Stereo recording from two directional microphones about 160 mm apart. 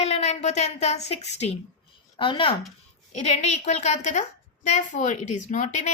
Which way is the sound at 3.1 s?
45° left (ahead or behind).